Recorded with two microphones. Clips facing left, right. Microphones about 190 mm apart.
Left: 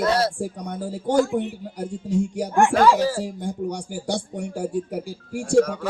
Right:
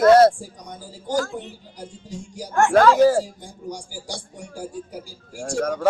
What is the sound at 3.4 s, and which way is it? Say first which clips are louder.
A man's voice: left 7 dB; 65° left (ahead or behind).